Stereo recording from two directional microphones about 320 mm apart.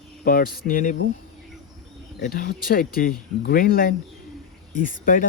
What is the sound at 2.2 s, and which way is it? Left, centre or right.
Speech, left.